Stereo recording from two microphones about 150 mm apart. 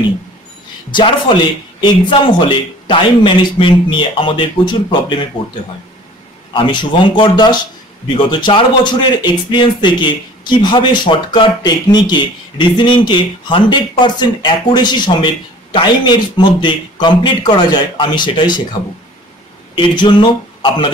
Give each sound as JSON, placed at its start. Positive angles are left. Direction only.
{"t": 0.9, "sound": "a man's voice", "side_deg": 35}
{"t": 6.5, "sound": "a man's voice", "side_deg": 35}